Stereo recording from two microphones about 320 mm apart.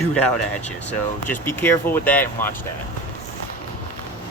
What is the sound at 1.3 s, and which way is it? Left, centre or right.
Speech, centre.